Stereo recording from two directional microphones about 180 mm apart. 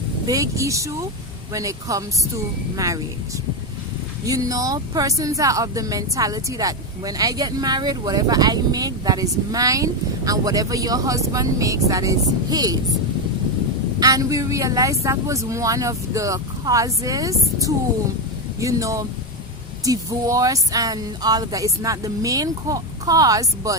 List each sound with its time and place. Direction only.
0.3 s speech: 20° right (ahead or behind)
4.3 s speech: 20° right (ahead or behind)
14.0 s speech: 20° right (ahead or behind)